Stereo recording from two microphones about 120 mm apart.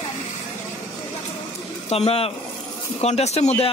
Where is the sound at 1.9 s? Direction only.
60° left (ahead or behind).